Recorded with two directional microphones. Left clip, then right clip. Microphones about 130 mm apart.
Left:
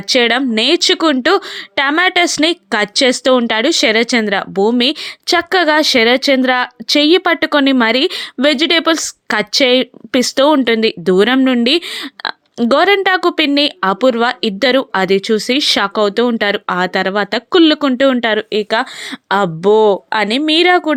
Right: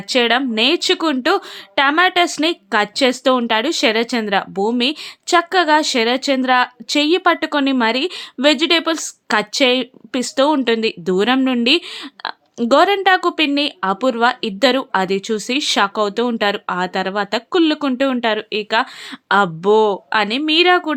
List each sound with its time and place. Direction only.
0.1 s speech: 35° left (ahead or behind)